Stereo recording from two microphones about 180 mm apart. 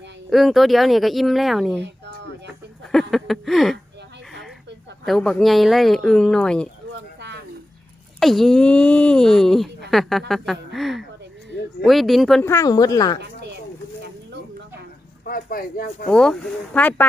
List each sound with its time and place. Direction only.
0.3 s speech: centre (ahead or behind)
2.9 s speech: centre (ahead or behind)
5.0 s speech: centre (ahead or behind)
8.2 s speech: centre (ahead or behind)
12.4 s speech: 15° left (ahead or behind)
15.2 s speech: 55° left (ahead or behind)
16.0 s speech: 5° left (ahead or behind)